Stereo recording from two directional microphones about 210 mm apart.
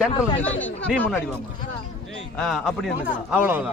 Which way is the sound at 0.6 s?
5° left (ahead or behind).